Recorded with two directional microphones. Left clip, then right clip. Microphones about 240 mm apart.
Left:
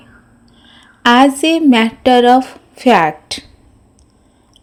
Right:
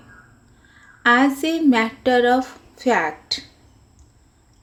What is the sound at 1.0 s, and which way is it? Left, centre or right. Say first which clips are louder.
A woman's voice: left 7 dB; left.